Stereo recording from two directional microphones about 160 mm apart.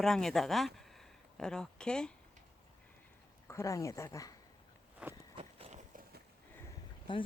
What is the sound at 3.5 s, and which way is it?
Speech, 20° left (ahead or behind).